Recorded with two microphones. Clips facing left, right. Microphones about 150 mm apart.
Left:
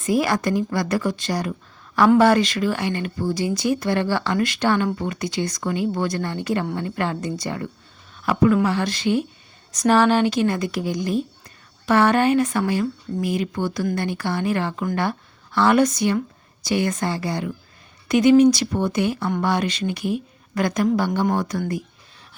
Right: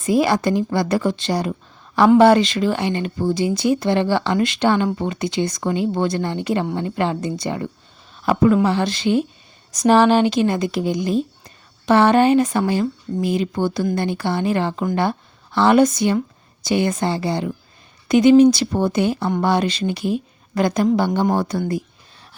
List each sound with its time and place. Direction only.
0.1 s speech: 25° right (ahead or behind)